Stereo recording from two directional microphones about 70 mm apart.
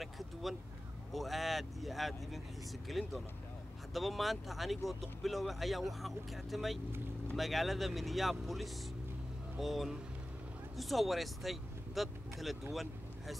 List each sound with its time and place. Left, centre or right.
0.0 s speech: centre